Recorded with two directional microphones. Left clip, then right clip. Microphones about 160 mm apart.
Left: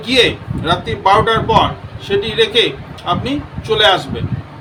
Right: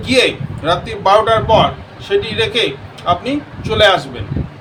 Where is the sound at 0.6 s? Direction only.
5° right (ahead or behind).